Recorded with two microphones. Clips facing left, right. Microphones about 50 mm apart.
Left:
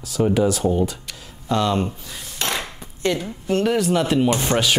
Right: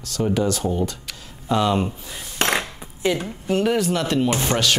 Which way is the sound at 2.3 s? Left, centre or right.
Right.